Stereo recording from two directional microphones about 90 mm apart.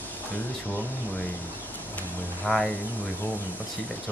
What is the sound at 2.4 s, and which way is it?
Speech, 5° left (ahead or behind).